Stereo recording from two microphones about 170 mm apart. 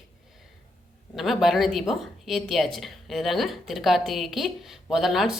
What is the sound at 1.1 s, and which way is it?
A woman's voice, centre (ahead or behind).